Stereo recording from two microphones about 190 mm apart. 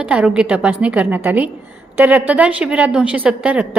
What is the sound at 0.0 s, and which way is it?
A woman's voice, 5° right (ahead or behind).